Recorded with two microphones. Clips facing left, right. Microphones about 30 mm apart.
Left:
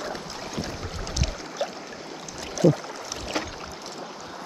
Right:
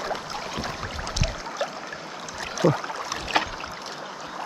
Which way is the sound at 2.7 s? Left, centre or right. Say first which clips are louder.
Left 1 dB; right.